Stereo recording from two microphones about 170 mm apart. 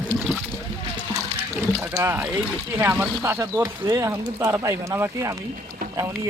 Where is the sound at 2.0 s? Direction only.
10° right (ahead or behind).